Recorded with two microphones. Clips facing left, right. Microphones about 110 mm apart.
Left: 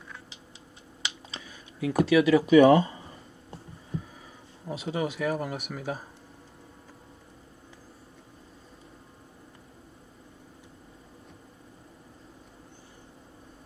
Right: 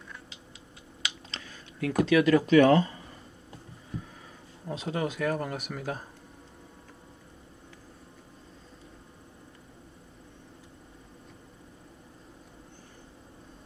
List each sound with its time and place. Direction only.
1.3 s computer keyboard: 10° left (ahead or behind)
2.0 s speech: 5° left (ahead or behind)
4.6 s speech: 5° left (ahead or behind)